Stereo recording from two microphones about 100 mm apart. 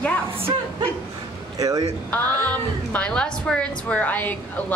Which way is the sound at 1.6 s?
40° right (ahead or behind).